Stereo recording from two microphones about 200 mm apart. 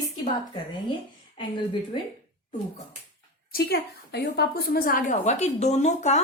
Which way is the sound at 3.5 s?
50° left (ahead or behind).